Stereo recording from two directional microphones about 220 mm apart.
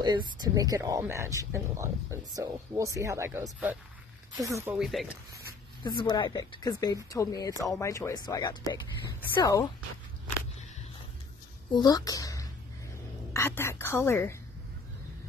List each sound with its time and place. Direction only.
0.0 s speech: 20° right (ahead or behind)
4.7 s speech: centre (ahead or behind)
5.9 s speech: 20° left (ahead or behind)
11.7 s speech: 15° left (ahead or behind)